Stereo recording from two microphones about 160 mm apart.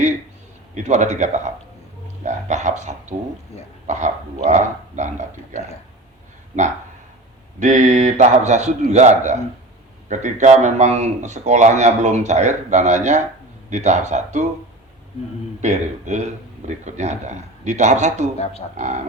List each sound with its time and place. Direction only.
0.7 s a man's voice: 45° right (ahead or behind)
3.5 s croak: 40° left (ahead or behind)
3.8 s a man's voice: 50° right (ahead or behind)
7.6 s a man's voice: 50° right (ahead or behind)
15.6 s a man's voice: 45° right (ahead or behind)
18.3 s croak: 40° left (ahead or behind)
18.8 s a man's voice: 50° right (ahead or behind)